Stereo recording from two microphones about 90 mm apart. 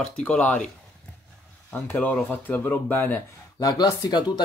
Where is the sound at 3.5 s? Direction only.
50° left (ahead or behind).